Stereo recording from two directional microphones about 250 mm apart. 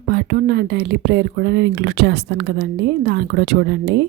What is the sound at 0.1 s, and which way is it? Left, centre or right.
A woman's voice, right.